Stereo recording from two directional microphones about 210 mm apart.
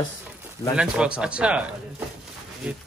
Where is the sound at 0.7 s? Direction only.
5° right (ahead or behind).